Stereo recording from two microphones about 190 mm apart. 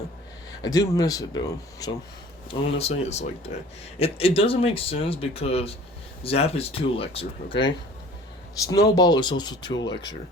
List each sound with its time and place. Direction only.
0.6 s speech: 20° left (ahead or behind)
2.5 s speech: 35° left (ahead or behind)
8.5 s speech: 20° left (ahead or behind)